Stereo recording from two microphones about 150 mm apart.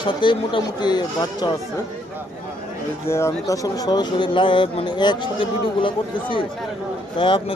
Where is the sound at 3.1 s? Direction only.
20° left (ahead or behind).